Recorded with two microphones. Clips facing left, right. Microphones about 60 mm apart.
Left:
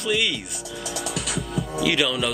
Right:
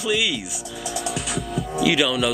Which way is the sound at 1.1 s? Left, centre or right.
Centre.